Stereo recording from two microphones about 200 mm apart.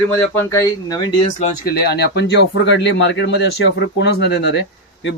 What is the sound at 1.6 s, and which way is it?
Speech, 50° left (ahead or behind).